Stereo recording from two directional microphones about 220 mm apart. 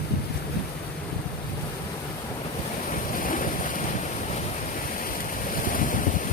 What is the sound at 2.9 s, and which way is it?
Vehicle, 40° left (ahead or behind).